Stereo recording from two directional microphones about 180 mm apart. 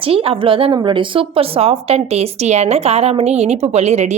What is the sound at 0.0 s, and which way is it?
A woman's voice, 30° right (ahead or behind).